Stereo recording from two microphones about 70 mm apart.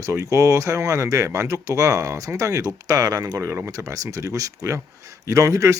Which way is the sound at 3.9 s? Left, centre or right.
Right.